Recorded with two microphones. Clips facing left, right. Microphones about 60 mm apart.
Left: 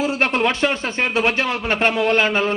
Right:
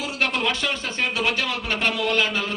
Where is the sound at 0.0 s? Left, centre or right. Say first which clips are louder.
Left 6 dB; left.